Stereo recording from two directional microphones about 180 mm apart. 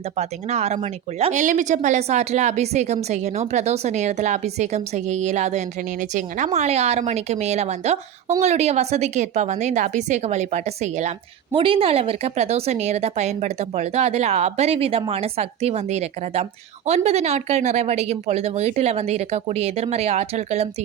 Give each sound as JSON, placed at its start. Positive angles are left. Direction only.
{"t": 0.2, "sound": "speech", "side_deg": -35}